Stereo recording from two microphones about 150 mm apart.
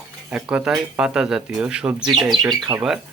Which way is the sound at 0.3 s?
5° right (ahead or behind).